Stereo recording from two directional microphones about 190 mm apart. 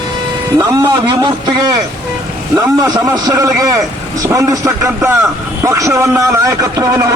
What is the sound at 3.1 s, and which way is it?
A man's voice, 20° right (ahead or behind).